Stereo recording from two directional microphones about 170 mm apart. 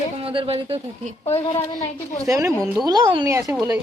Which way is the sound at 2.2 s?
20° right (ahead or behind).